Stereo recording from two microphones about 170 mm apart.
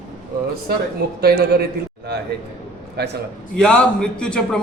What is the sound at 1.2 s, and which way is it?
Speech, 65° right (ahead or behind).